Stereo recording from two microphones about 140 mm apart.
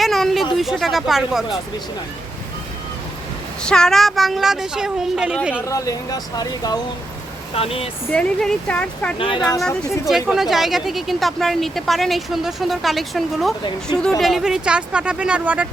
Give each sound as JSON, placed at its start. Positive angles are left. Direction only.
{"t": 0.0, "sound": "a sound", "side_deg": 0}
{"t": 0.5, "sound": "a woman's voice", "side_deg": 0}
{"t": 3.6, "sound": "a woman's voice", "side_deg": 5}
{"t": 5.6, "sound": "speech", "side_deg": 25}
{"t": 7.5, "sound": "speech", "side_deg": 45}
{"t": 8.1, "sound": "speech", "side_deg": 5}
{"t": 9.1, "sound": "speech", "side_deg": 40}
{"t": 10.1, "sound": "a woman's voice", "side_deg": -5}